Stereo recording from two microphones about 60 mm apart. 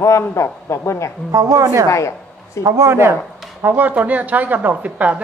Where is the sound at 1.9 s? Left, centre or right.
Left.